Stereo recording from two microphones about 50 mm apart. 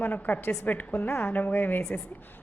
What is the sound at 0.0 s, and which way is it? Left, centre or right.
A woman's voice, left.